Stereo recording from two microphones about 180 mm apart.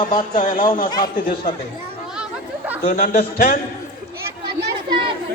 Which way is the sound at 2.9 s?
50° left (ahead or behind).